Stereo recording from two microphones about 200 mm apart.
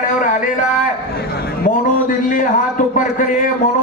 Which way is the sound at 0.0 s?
40° left (ahead or behind).